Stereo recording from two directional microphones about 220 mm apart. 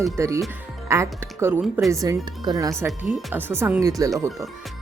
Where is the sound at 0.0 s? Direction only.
15° right (ahead or behind).